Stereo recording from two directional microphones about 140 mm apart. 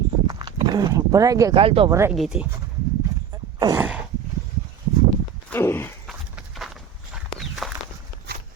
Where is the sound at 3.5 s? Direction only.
25° right (ahead or behind).